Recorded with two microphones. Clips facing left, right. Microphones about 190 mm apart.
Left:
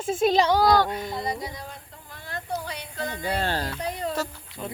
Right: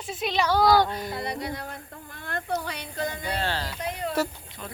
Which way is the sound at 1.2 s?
65° right (ahead or behind).